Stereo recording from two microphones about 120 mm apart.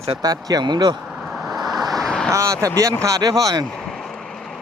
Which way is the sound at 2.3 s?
25° right (ahead or behind).